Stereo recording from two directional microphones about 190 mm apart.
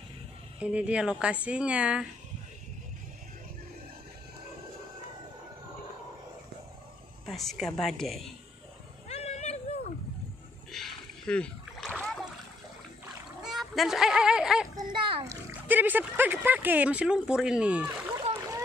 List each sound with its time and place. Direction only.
0.6 s speech: 5° right (ahead or behind)
7.2 s a woman's voice: centre (ahead or behind)
9.1 s a sound: 35° left (ahead or behind)
10.7 s splash: centre (ahead or behind)
13.4 s speech: centre (ahead or behind)
14.8 s a child's voice: 25° right (ahead or behind)
15.2 s speech: 10° right (ahead or behind)